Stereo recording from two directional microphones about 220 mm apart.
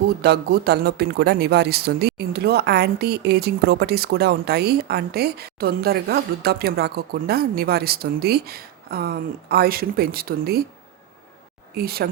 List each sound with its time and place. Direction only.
0.2 s speech: 45° right (ahead or behind)
11.8 s speech: 45° right (ahead or behind)